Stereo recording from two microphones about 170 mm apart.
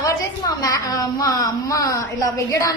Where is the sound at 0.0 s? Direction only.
20° left (ahead or behind).